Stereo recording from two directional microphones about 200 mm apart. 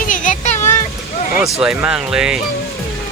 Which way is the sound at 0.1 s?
40° left (ahead or behind).